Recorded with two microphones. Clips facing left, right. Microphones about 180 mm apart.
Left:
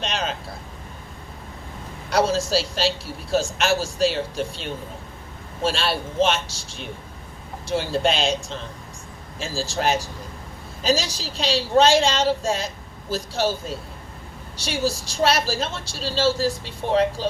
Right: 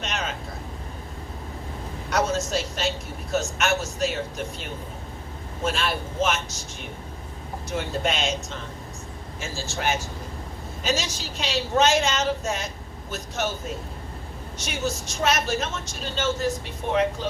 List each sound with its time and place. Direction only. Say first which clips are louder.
0.0 s vehicle: left 3 dB; 30° left (ahead or behind)
2.0 s a woman's voice: left 4 dB; 30° left (ahead or behind)